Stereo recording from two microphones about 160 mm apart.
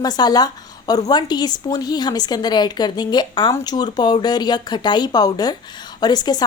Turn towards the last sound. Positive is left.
turn(degrees=25)  # may be behind; listen again after turning